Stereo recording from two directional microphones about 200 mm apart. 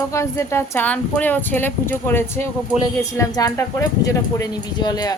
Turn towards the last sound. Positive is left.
turn(degrees=20)  # may be behind; listen again after turning